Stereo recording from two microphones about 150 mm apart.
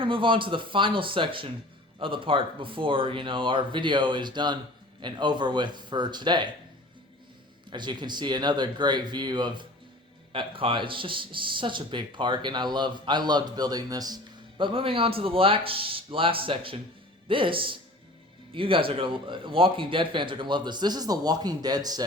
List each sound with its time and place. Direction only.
0.0 s speech: 35° right (ahead or behind)
7.7 s speech: 30° right (ahead or behind)
14.6 s speech: 35° right (ahead or behind)